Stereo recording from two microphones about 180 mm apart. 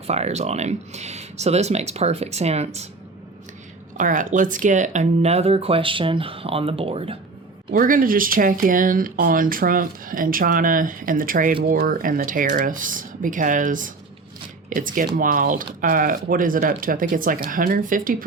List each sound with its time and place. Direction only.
0.1 s speech: 35° right (ahead or behind)
3.9 s speech: 45° right (ahead or behind)
7.7 s speech: 50° right (ahead or behind)